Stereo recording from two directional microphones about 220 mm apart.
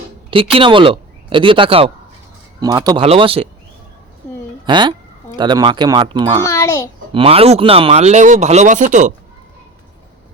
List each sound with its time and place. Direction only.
0.3 s speech: 25° right (ahead or behind)
4.6 s speech: 20° right (ahead or behind)
6.5 s a sound: 15° left (ahead or behind)
7.1 s speech: 25° right (ahead or behind)